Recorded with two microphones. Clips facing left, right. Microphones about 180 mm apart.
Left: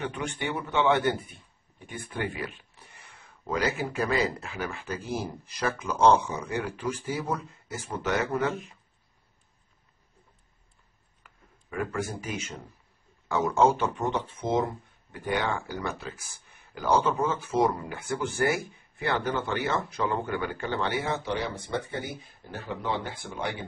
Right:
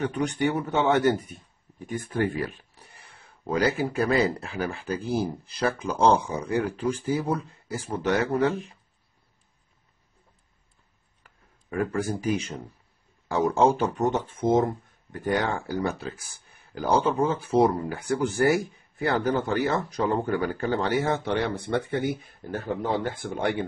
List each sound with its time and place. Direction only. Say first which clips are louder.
0.0 s a man's voice: right 7 dB; 40° right (ahead or behind)
11.7 s speech: right 4 dB; 35° right (ahead or behind); by 23.6 s 55° right (ahead or behind)